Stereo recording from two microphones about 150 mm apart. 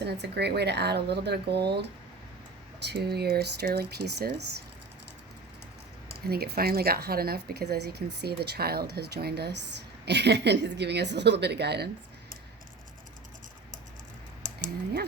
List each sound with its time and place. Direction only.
0.0 s speech: 90° right
2.8 s speech: 90° right
6.1 s speech: 90° right